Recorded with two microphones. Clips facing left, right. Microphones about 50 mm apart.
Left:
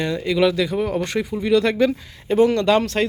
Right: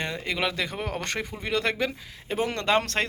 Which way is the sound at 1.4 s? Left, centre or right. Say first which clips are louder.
Left 9 dB; right.